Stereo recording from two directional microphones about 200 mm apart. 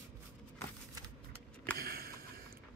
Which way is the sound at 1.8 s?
50° right (ahead or behind).